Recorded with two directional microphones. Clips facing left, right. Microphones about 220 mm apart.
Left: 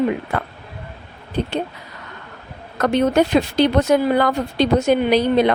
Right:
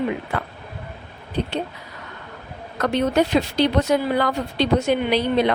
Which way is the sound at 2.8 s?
50° left (ahead or behind).